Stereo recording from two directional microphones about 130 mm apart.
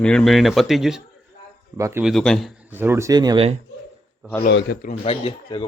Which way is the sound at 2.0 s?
5° left (ahead or behind).